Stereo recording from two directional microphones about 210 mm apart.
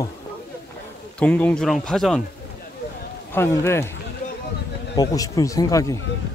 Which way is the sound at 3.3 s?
10° left (ahead or behind).